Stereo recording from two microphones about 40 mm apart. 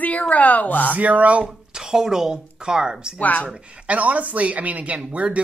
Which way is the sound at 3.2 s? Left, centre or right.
Left.